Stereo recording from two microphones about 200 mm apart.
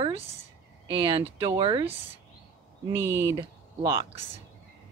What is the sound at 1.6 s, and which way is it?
Speech, 25° right (ahead or behind).